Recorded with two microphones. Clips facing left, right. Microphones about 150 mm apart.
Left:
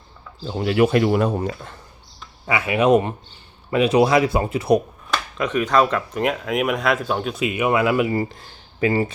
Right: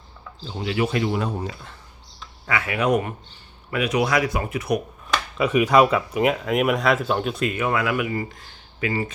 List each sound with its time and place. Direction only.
0.6 s speech: 50° left (ahead or behind)
2.5 s speech: 20° left (ahead or behind)
5.1 s speech: 10° right (ahead or behind); by 9.1 s 35° left (ahead or behind)